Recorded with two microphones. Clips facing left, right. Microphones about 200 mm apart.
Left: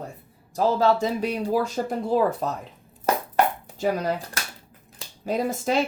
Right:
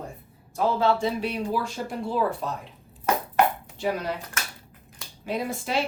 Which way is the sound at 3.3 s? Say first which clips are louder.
Even; 40° left (ahead or behind).